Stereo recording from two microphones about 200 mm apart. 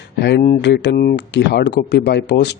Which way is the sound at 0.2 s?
55° left (ahead or behind).